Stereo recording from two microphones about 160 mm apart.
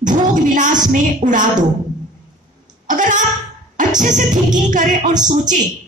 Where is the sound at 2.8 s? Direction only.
50° right (ahead or behind).